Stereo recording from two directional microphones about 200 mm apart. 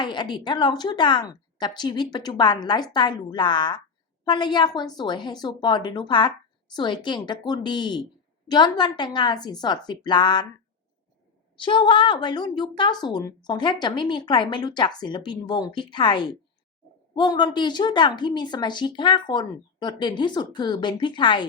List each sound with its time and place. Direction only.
0.0 s speech: 20° left (ahead or behind)
11.6 s speech: 25° left (ahead or behind)